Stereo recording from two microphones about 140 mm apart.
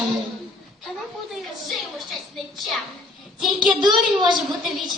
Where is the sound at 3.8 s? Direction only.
30° right (ahead or behind).